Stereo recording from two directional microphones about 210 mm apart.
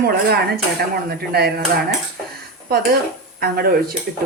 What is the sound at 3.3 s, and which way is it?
Speech, 45° right (ahead or behind).